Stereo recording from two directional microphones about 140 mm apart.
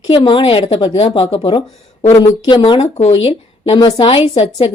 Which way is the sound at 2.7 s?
45° left (ahead or behind).